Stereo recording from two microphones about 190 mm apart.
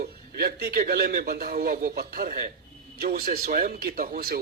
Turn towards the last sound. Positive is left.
turn(degrees=-50)  # may be behind; listen again after turning